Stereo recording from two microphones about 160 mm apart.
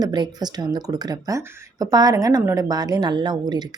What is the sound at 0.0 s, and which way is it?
Speech, 25° right (ahead or behind).